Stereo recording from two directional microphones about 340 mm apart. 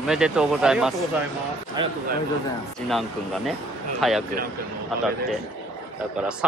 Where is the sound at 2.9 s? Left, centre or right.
Centre.